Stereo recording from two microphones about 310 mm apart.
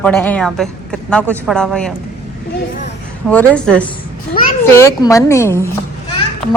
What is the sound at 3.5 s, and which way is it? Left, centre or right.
A woman's voice, centre.